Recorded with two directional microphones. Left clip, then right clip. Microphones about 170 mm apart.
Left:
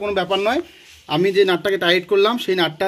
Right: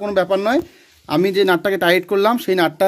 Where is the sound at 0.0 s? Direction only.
55° right (ahead or behind).